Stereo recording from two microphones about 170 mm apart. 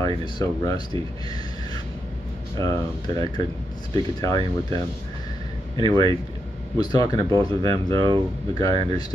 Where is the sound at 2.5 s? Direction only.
20° left (ahead or behind).